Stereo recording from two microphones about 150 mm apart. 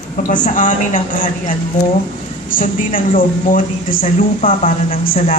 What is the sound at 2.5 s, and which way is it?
A woman's voice, 65° left (ahead or behind).